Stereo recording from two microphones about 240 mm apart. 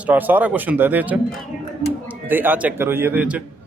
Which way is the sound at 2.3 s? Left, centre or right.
Centre.